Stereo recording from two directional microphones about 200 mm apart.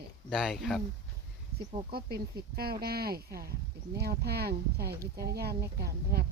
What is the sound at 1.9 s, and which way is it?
Speech, 50° right (ahead or behind).